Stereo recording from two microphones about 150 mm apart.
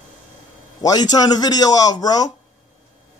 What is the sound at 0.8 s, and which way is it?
A man's voice, 25° left (ahead or behind).